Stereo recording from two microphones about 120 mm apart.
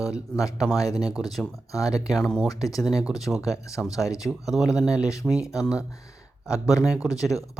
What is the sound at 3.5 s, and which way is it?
Speech, 25° left (ahead or behind).